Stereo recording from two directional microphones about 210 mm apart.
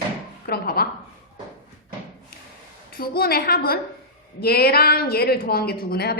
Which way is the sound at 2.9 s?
45° left (ahead or behind).